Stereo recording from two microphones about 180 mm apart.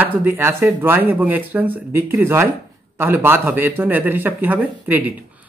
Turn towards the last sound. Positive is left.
turn(degrees=-10)  # may be behind; listen again after turning